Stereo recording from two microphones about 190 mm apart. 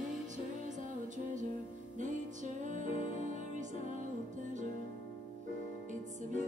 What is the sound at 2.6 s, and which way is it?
Music, 40° right (ahead or behind).